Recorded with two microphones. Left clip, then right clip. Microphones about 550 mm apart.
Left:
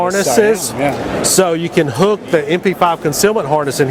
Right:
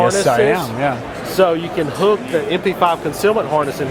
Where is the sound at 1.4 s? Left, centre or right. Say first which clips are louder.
Even; left.